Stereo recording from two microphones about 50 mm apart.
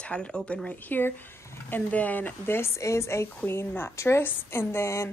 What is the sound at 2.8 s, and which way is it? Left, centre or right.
Speech, left.